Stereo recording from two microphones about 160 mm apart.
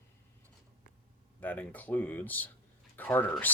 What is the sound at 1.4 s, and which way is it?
Speech, 10° left (ahead or behind).